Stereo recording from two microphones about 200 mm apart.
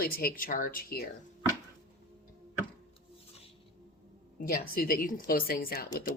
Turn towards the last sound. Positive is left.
turn(degrees=50)  # may be behind; listen again after turning